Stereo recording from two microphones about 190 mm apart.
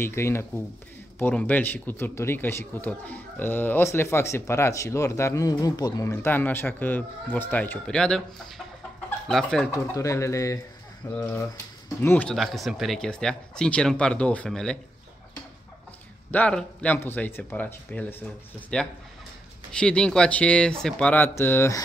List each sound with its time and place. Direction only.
0.0 s speech: 15° left (ahead or behind)
9.3 s speech: 5° left (ahead or behind)
9.7 s speech: 15° left (ahead or behind)
16.3 s speech: 5° left (ahead or behind)